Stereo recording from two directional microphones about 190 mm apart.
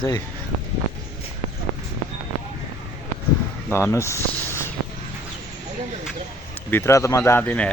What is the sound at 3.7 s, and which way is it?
Speech, 15° left (ahead or behind).